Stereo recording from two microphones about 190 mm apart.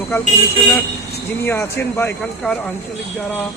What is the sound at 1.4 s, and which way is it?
Speech, 10° left (ahead or behind).